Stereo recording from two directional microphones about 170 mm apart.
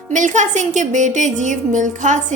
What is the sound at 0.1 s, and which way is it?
A woman's voice, 45° right (ahead or behind).